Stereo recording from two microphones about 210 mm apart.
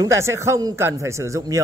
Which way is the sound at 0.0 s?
15° right (ahead or behind).